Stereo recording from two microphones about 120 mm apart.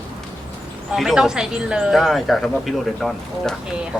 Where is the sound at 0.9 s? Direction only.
Centre (ahead or behind).